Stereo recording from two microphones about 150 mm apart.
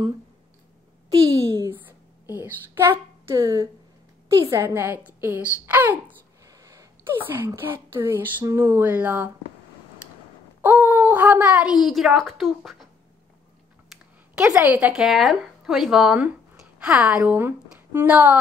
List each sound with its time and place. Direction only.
1.1 s a sound: 20° right (ahead or behind)
2.3 s a woman's voice: 15° right (ahead or behind)
6.4 s a sound: 20° right (ahead or behind)
7.2 s speech: 15° right (ahead or behind)
10.6 s a woman's voice: 10° right (ahead or behind)
13.8 s speech: 5° right (ahead or behind)